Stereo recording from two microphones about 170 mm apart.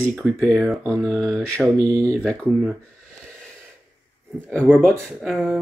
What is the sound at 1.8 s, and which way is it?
Speech, 20° right (ahead or behind).